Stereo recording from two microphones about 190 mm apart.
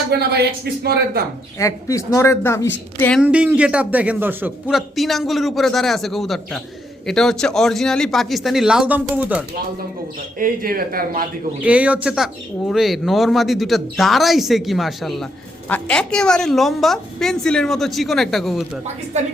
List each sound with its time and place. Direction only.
0.1 s speech: 60° right (ahead or behind)
1.5 s speech: 15° left (ahead or behind)
3.2 s speech: 5° right (ahead or behind)
10.3 s speech: 50° right (ahead or behind)
11.6 s speech: 5° right (ahead or behind)